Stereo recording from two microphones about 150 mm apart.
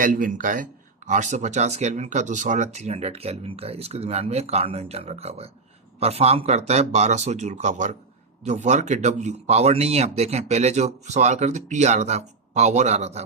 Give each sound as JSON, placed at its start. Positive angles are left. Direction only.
{"t": 0.0, "sound": "speech", "side_deg": -65}